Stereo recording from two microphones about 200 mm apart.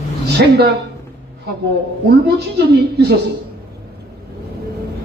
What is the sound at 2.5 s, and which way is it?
Speech, 55° right (ahead or behind).